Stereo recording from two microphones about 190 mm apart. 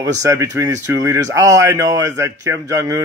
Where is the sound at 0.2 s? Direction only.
15° right (ahead or behind).